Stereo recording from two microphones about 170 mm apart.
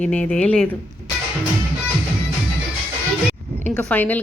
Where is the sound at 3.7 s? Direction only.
10° left (ahead or behind).